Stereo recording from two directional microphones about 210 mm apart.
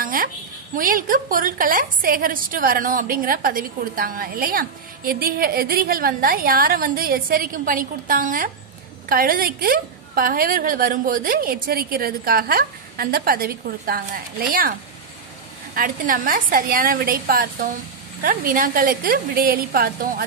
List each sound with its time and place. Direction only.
0.0 s a sound: 40° right (ahead or behind)
0.7 s a woman's voice: 40° right (ahead or behind)
15.7 s a woman's voice: 45° right (ahead or behind)